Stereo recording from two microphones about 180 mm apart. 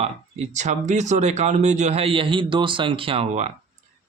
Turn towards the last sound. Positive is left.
turn(degrees=-40)  # may be behind; listen again after turning